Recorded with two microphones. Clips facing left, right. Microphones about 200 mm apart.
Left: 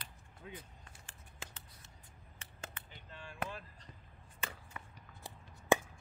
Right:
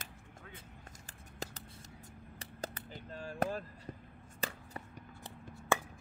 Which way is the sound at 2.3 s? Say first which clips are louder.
Right 8 dB; 35° right (ahead or behind).